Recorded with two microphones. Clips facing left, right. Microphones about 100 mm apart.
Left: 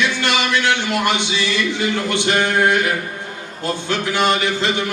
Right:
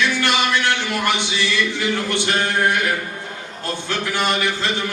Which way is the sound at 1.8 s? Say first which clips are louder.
Left 2 dB; 20° left (ahead or behind).